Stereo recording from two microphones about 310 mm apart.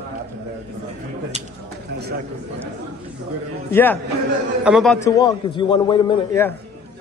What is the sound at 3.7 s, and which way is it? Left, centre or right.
A man's voice, centre.